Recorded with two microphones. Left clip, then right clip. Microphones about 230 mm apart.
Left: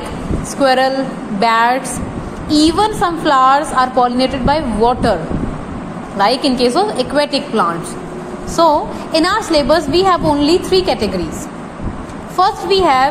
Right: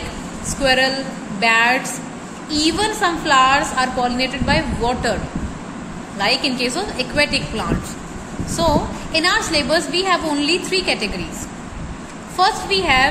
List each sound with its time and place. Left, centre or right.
0.6 s a woman's voice: centre
6.1 s a woman's voice: centre
12.4 s a woman's voice: centre